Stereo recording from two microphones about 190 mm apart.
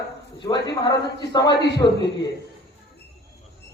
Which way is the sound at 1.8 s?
20° left (ahead or behind).